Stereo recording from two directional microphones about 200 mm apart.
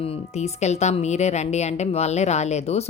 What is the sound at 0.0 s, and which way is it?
Speech, 30° left (ahead or behind).